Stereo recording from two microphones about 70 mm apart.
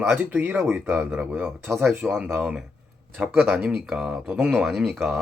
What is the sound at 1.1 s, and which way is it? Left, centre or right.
Speech, centre.